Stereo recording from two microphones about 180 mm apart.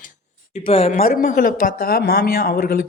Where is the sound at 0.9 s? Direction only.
50° left (ahead or behind).